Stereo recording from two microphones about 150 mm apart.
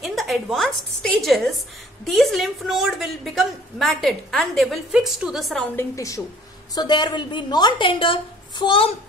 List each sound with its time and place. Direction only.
0.0 s a woman's voice: centre (ahead or behind)
5.8 s a woman's voice: 20° left (ahead or behind)